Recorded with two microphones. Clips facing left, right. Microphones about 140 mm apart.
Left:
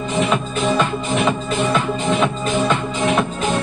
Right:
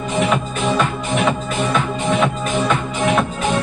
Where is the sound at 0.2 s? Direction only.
Centre (ahead or behind).